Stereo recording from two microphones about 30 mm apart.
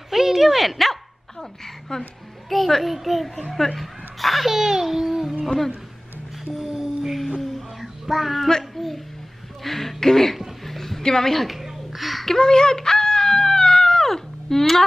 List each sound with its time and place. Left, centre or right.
0.1 s speech: centre
1.4 s a woman's voice: centre
2.5 s a child's voice: centre
3.3 s a child's voice: centre
4.6 s speech: centre
6.7 s music: centre
7.5 s child singing: centre
8.7 s a sound: centre
9.6 s a woman's voice: centre
10.6 s music: centre
11.0 s a woman's voice: centre
11.4 s a sound: centre
12.3 s wail: left